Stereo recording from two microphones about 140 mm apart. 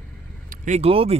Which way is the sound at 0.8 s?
45° right (ahead or behind).